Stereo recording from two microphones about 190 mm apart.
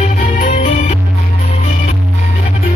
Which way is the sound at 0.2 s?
40° left (ahead or behind).